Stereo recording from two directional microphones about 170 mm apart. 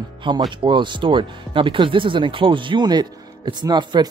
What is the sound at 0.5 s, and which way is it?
Speech, 30° right (ahead or behind).